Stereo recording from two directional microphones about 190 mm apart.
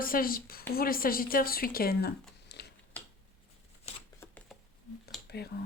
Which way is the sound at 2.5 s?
60° left (ahead or behind).